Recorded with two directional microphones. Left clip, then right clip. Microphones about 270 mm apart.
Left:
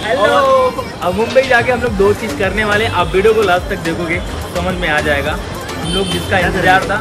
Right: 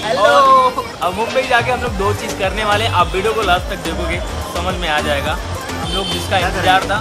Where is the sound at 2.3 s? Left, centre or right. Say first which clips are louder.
Left 2 dB; centre.